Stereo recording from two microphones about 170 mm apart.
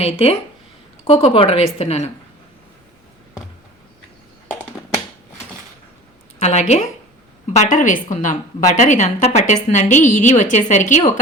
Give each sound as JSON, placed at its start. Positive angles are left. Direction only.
{"t": 0.0, "sound": "speech", "side_deg": 35}
{"t": 6.4, "sound": "a woman's voice", "side_deg": 40}